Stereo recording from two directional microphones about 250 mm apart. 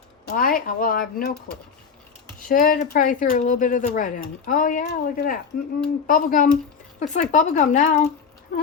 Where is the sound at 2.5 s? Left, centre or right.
Left.